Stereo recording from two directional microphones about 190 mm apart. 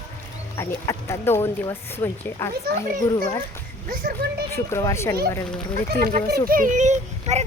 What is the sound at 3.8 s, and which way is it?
Speech, 50° right (ahead or behind).